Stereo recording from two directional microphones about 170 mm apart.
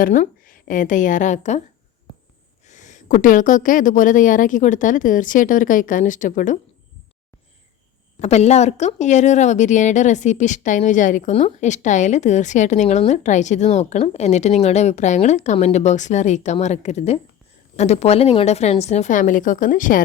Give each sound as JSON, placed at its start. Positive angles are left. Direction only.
{"t": 0.0, "sound": "a woman's voice", "side_deg": 50}
{"t": 2.6, "sound": "a woman's voice", "side_deg": 45}
{"t": 8.2, "sound": "a woman's voice", "side_deg": 40}